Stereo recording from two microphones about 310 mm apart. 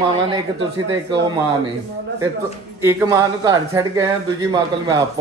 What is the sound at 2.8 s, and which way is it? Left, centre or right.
A man's voice, centre.